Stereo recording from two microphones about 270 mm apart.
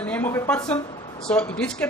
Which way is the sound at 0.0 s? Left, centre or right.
Centre.